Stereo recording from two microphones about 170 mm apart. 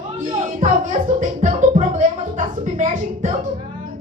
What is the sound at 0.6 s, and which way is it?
Music, 50° right (ahead or behind).